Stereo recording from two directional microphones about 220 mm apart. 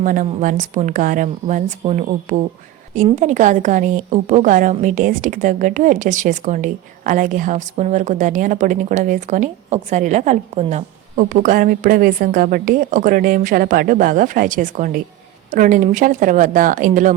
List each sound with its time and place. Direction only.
0.0 s a woman's voice: 35° right (ahead or behind)